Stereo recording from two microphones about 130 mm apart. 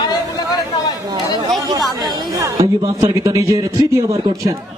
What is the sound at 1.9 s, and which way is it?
Chatter, 35° right (ahead or behind).